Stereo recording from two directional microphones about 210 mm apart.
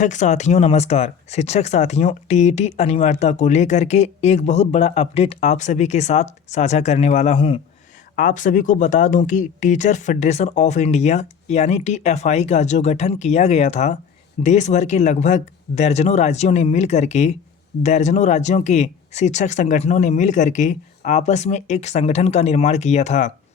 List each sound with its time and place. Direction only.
0.0 s speech: 35° left (ahead or behind)
8.1 s speech: 35° left (ahead or behind)